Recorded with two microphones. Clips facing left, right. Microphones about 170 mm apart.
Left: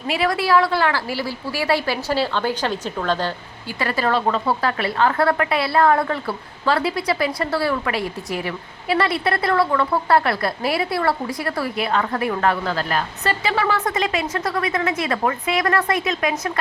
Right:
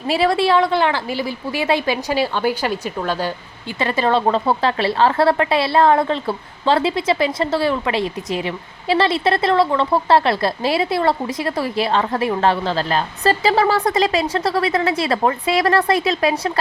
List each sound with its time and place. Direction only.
0.1 s a woman's voice: 30° right (ahead or behind); by 3.3 s 10° right (ahead or behind)
3.8 s a woman's voice: 20° right (ahead or behind)